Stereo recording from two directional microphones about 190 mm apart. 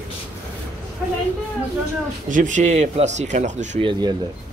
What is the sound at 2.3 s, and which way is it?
Speech, 40° right (ahead or behind).